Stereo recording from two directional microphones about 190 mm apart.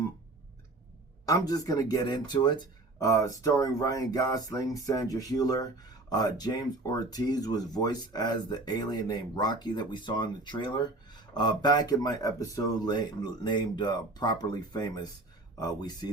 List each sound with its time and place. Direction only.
1.2 s speech: 20° left (ahead or behind)